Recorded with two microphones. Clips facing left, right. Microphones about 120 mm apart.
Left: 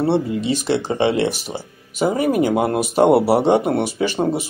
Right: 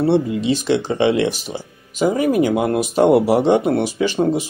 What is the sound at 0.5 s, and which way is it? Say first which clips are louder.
Speech: right 3 dB; 45° left (ahead or behind).